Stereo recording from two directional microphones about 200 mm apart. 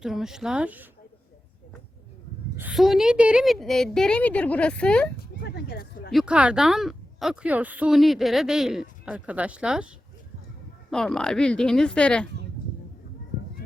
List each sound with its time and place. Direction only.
0.0 s a woman's voice: centre (ahead or behind)
2.6 s a woman's voice: 5° right (ahead or behind)
5.4 s a sound: 55° left (ahead or behind)
6.1 s a woman's voice: 5° right (ahead or behind)
10.9 s a woman's voice: 5° left (ahead or behind)